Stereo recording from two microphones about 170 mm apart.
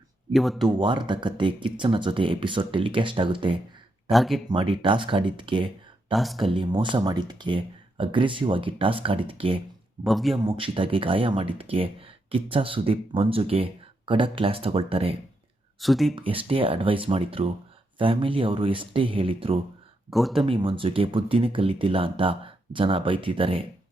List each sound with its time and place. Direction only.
0.3 s speech: centre (ahead or behind)
0.8 s speech: 30° right (ahead or behind)
4.1 s speech: centre (ahead or behind)
4.4 s speech: 30° right (ahead or behind)
6.1 s speech: centre (ahead or behind)
6.4 s speech: 30° right (ahead or behind)
10.0 s speech: centre (ahead or behind)
10.4 s speech: 30° right (ahead or behind)
15.8 s speech: centre (ahead or behind)
16.1 s speech: 30° right (ahead or behind)
20.1 s speech: centre (ahead or behind)
20.4 s speech: 30° right (ahead or behind)